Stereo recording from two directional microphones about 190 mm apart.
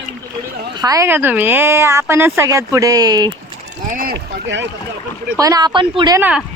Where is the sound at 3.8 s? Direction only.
50° right (ahead or behind).